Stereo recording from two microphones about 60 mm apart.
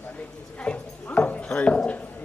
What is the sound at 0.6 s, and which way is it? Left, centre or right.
Dog, centre.